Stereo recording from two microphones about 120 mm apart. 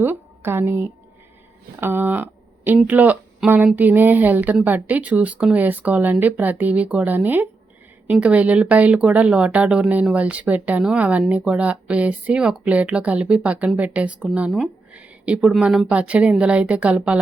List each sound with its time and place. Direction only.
0.0 s a woman's voice: 20° right (ahead or behind)